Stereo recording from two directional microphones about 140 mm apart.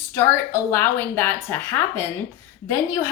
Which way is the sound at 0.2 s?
20° left (ahead or behind).